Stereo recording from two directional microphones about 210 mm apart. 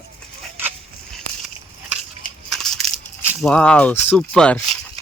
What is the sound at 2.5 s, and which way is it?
Crushing, centre (ahead or behind).